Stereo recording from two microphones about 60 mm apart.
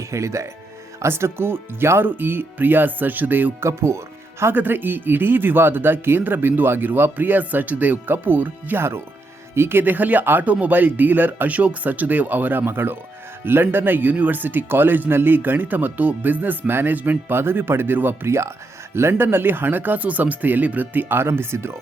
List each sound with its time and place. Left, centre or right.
0.1 s speech: right
1.0 s speech: right
3.6 s speech: right
4.5 s speech: right
18.3 s speech: right
19.1 s speech: right